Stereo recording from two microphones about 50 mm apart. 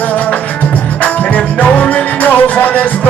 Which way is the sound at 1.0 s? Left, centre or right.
Left.